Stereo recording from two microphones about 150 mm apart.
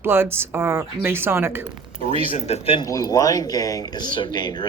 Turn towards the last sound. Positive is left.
turn(degrees=30)  # may be behind; listen again after turning